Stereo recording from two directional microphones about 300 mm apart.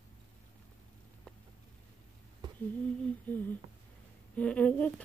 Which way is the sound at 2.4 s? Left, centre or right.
Centre.